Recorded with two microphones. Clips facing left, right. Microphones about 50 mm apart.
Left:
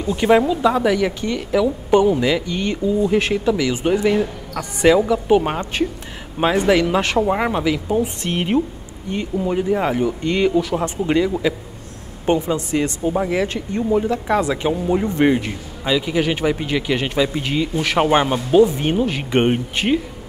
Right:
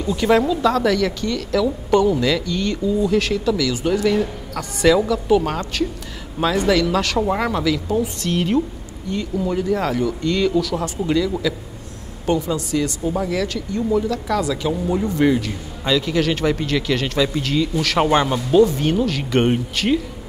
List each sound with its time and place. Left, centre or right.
0.0 s a woman's voice: left
15.8 s a woman's voice: centre